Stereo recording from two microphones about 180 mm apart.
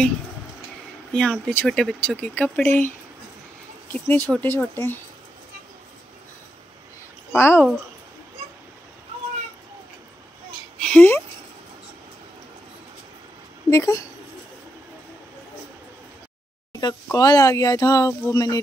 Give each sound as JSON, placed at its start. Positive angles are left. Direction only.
{"t": 1.1, "sound": "speech", "side_deg": 5}
{"t": 3.9, "sound": "speech", "side_deg": 10}
{"t": 7.3, "sound": "speech", "side_deg": 15}
{"t": 10.8, "sound": "speech", "side_deg": 10}
{"t": 13.7, "sound": "speech", "side_deg": 15}
{"t": 16.8, "sound": "speech", "side_deg": 20}